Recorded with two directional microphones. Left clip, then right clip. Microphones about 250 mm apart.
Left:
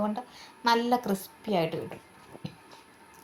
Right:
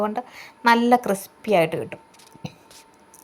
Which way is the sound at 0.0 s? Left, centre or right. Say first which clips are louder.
Right 7 dB; right.